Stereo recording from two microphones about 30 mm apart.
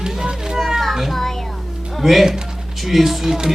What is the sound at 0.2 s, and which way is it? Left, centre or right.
Children playing, centre.